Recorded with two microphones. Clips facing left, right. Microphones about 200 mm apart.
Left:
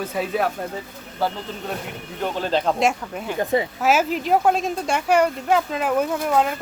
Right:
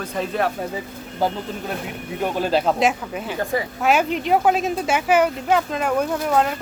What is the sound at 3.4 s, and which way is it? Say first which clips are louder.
Speech: left 3 dB; 20° left (ahead or behind).